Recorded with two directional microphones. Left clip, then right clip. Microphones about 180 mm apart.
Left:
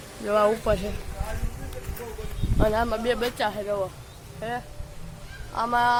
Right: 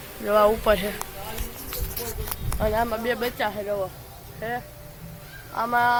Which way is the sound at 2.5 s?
20° left (ahead or behind).